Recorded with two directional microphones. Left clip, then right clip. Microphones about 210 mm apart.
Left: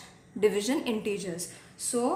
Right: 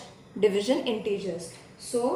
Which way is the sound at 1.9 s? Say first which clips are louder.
Right 2 dB; 60° left (ahead or behind).